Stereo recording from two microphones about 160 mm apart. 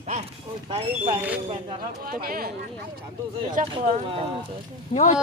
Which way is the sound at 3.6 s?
55° right (ahead or behind).